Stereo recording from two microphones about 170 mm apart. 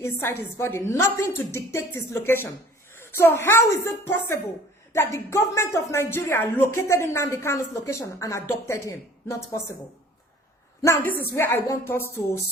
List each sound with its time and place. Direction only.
0.0 s speech: 15° left (ahead or behind)
10.8 s speech: 20° left (ahead or behind)